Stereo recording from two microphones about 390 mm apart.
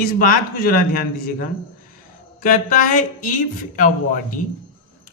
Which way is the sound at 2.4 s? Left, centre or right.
Left.